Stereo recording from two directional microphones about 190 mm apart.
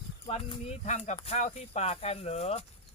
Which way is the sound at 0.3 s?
35° left (ahead or behind).